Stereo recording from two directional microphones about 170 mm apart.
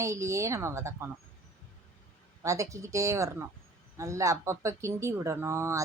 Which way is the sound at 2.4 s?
20° right (ahead or behind).